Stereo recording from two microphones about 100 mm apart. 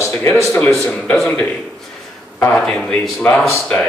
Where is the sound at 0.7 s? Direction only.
10° left (ahead or behind).